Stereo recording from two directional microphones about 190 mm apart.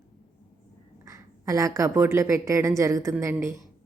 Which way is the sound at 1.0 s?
15° right (ahead or behind).